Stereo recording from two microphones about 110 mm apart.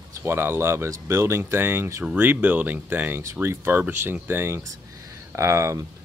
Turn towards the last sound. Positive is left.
turn(degrees=-25)  # may be behind; listen again after turning